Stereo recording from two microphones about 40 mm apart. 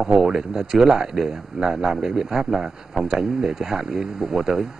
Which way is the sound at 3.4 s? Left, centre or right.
Centre.